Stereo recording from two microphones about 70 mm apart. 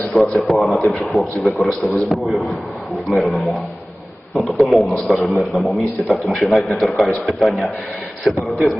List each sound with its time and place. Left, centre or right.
0.1 s a man's voice: centre